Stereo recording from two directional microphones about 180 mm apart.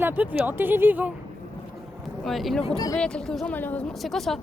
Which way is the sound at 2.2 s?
Centre (ahead or behind).